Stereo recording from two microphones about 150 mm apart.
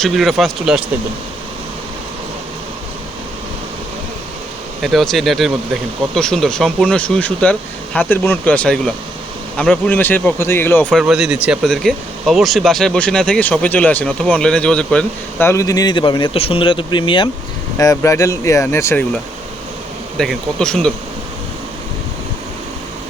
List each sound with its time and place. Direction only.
0.0 s speech: centre (ahead or behind)
4.8 s speech: centre (ahead or behind)
10.9 s speech: 5° right (ahead or behind); by 17.2 s 35° left (ahead or behind)
17.7 s speech: 20° left (ahead or behind)
20.1 s speech: 5° left (ahead or behind)